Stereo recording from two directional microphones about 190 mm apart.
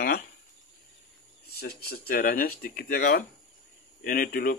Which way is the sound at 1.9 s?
50° left (ahead or behind).